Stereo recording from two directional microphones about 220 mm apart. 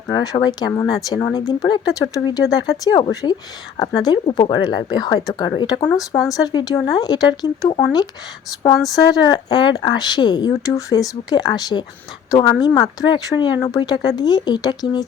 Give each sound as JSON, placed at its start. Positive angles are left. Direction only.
{"t": 0.1, "sound": "speech", "side_deg": 20}
{"t": 9.0, "sound": "speech", "side_deg": 15}